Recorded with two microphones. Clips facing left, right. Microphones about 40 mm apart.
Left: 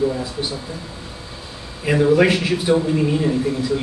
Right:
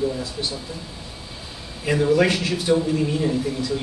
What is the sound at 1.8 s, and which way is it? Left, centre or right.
A man's voice, centre.